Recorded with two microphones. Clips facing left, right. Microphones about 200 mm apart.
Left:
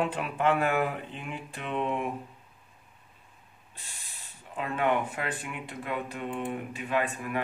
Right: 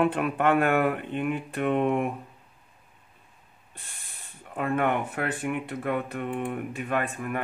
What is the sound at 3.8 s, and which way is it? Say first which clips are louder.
Speech: right 1 dB; 55° right (ahead or behind).